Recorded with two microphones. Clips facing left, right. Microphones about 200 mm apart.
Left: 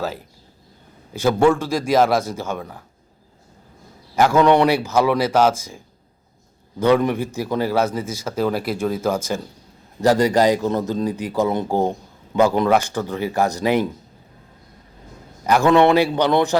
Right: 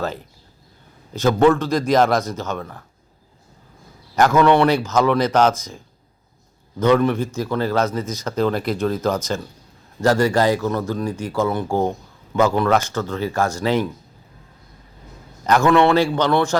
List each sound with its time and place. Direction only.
1.1 s speech: 10° left (ahead or behind)
4.1 s speech: 10° left (ahead or behind)
15.4 s speech: 15° left (ahead or behind)